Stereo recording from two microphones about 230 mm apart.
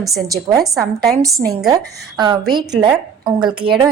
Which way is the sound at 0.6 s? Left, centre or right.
Centre.